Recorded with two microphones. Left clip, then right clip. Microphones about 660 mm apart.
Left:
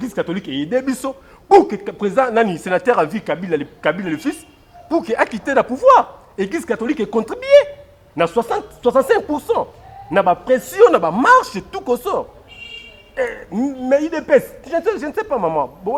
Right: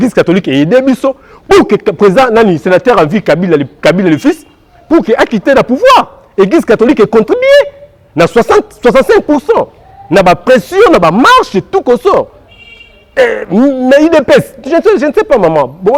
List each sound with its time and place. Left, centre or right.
0.0 s speech: right